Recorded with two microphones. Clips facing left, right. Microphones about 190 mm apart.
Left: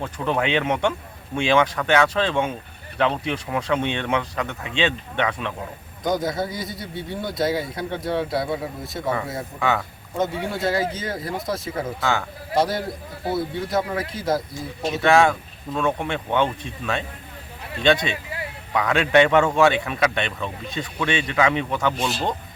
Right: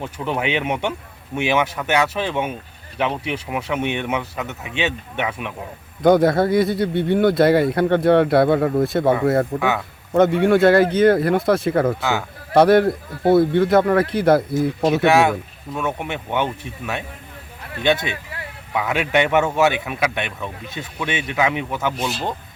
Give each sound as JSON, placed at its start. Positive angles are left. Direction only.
{"t": 0.0, "sound": "speech", "side_deg": -10}
{"t": 6.0, "sound": "speech", "side_deg": -60}
{"t": 9.6, "sound": "a man's voice", "side_deg": -5}
{"t": 10.1, "sound": "speech", "side_deg": -65}
{"t": 15.0, "sound": "speech", "side_deg": -5}
{"t": 17.8, "sound": "a man's voice", "side_deg": -5}